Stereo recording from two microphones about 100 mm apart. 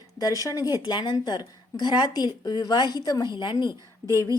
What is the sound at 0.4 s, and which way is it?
A woman's voice, 35° left (ahead or behind).